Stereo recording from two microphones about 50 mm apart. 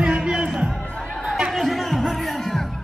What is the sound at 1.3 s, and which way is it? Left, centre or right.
Chatter, centre.